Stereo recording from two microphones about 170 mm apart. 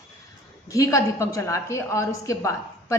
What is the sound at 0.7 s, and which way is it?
A woman's voice, 20° left (ahead or behind).